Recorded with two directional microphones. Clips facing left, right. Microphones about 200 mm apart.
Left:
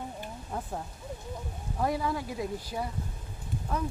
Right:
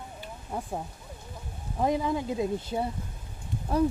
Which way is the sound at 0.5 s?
10° right (ahead or behind).